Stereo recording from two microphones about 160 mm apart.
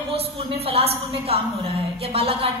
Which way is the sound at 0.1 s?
40° right (ahead or behind).